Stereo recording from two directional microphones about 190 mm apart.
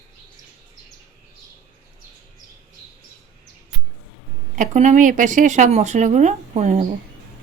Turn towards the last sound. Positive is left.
turn(degrees=-40)  # may be behind; listen again after turning